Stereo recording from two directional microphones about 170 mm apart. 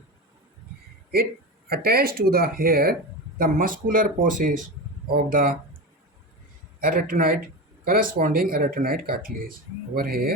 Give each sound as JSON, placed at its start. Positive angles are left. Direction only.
{"t": 1.7, "sound": "speech", "side_deg": -65}
{"t": 6.8, "sound": "speech", "side_deg": -55}